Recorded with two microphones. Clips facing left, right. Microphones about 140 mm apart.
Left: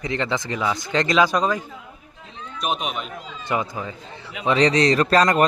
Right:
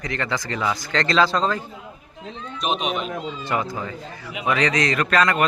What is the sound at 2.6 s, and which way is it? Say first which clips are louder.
Speech: right 1 dB; 5° left (ahead or behind).